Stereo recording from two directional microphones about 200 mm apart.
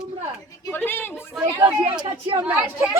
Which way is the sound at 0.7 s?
10° left (ahead or behind).